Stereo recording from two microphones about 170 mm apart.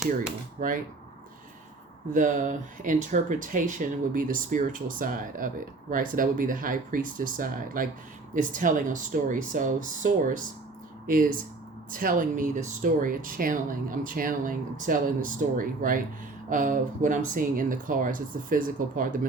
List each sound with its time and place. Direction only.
2.1 s speech: 50° right (ahead or behind)